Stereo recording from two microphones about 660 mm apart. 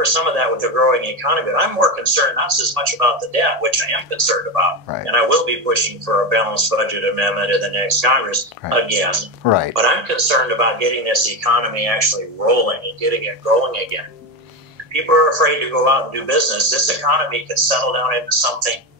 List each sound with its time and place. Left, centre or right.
0.0 s a man's voice: right
9.4 s speech: left
9.8 s a man's voice: right
15.0 s a man's voice: right